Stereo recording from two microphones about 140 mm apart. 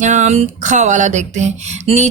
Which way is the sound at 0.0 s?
60° right (ahead or behind).